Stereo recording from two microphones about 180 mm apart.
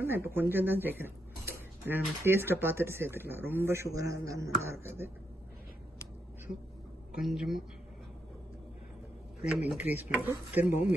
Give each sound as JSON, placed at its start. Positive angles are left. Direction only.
{"t": 0.0, "sound": "speech", "side_deg": -10}
{"t": 7.2, "sound": "a man's voice", "side_deg": 0}
{"t": 9.4, "sound": "a man's voice", "side_deg": -5}